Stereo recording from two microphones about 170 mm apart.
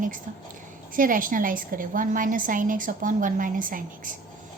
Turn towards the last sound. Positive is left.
turn(degrees=-55)  # may be behind; listen again after turning